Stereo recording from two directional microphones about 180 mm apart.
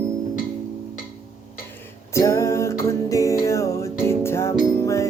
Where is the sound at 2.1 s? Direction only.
15° left (ahead or behind).